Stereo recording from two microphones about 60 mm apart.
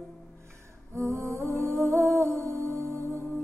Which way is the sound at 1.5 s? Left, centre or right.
Right.